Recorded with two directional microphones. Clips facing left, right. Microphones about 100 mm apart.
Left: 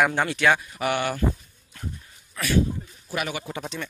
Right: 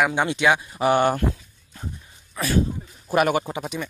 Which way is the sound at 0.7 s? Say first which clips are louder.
Right 6 dB; 35° right (ahead or behind).